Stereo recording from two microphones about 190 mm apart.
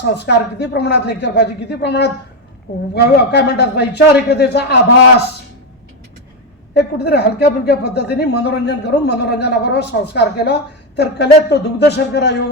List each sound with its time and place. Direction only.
0.1 s speech: 65° left (ahead or behind)
6.7 s speech: 60° left (ahead or behind)